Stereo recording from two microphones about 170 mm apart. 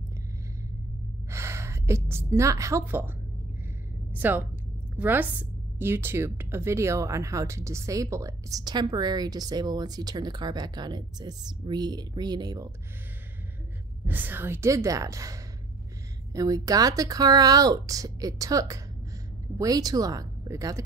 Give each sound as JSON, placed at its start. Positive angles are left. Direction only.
{"t": 1.3, "sound": "a woman's voice", "side_deg": -15}
{"t": 4.1, "sound": "a woman's voice", "side_deg": -10}
{"t": 14.0, "sound": "a woman's voice", "side_deg": -10}